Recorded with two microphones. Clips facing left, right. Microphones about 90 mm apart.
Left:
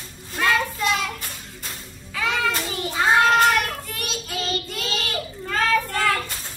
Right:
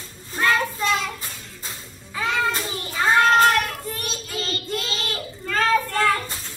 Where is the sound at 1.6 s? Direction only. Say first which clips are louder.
Even; 35° right (ahead or behind).